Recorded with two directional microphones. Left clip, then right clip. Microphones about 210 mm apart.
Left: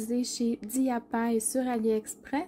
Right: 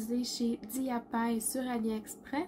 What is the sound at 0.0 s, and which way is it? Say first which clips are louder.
Speech: left 4 dB; 40° left (ahead or behind).